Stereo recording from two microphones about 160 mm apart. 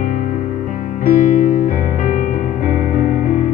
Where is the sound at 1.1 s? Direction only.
55° left (ahead or behind).